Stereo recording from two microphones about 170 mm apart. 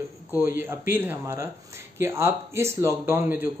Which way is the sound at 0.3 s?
15° right (ahead or behind).